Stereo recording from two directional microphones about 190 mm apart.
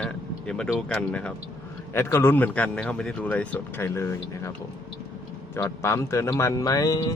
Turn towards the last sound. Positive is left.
turn(degrees=20)  # may be behind; listen again after turning